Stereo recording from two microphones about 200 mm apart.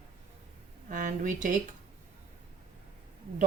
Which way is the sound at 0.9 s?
40° right (ahead or behind).